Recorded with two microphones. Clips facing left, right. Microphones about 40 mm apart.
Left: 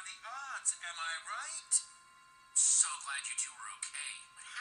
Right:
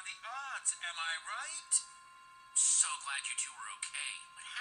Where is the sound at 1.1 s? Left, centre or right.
Right.